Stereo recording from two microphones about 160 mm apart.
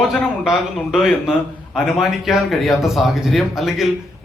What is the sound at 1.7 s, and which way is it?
Speech, centre (ahead or behind).